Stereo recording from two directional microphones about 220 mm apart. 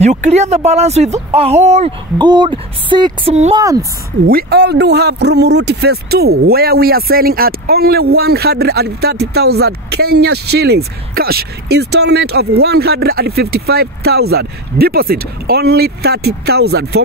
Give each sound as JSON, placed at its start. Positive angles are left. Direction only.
{"t": 0.0, "sound": "speech", "side_deg": -30}
{"t": 4.3, "sound": "speech", "side_deg": -45}